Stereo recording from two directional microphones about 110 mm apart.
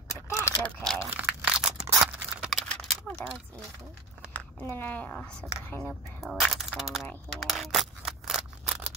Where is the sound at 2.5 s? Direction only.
5° left (ahead or behind).